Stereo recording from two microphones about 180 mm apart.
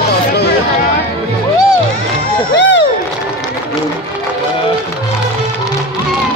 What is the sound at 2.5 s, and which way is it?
Crowd, 75° left (ahead or behind).